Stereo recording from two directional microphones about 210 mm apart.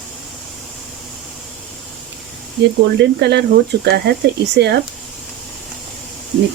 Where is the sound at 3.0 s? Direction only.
55° right (ahead or behind).